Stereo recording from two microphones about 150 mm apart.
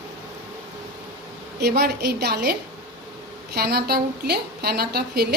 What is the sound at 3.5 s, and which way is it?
A woman's voice, 90° right.